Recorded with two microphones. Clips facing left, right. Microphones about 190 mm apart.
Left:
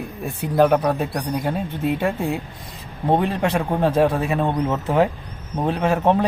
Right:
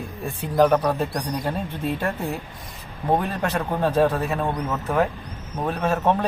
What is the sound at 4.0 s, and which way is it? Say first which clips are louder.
Speech: left 2 dB; 10° left (ahead or behind).